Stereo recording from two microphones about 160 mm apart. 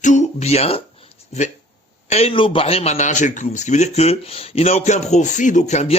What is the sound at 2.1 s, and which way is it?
A man's voice, 40° left (ahead or behind).